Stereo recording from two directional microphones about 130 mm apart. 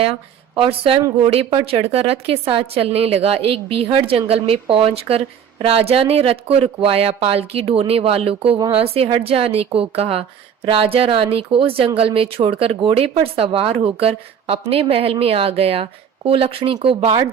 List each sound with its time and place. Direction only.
0.0 s a woman's voice: 45° right (ahead or behind)